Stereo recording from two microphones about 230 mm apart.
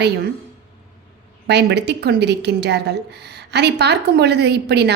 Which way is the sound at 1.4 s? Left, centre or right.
Right.